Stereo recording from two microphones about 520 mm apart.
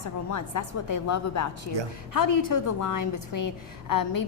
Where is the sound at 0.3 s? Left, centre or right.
Left.